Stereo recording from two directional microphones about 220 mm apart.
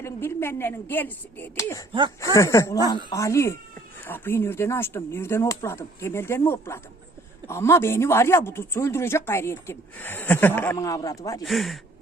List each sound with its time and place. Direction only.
0.0 s speech: 10° left (ahead or behind)
1.9 s speech: 20° right (ahead or behind)
2.3 s speech: 15° left (ahead or behind)
11.4 s speech: centre (ahead or behind)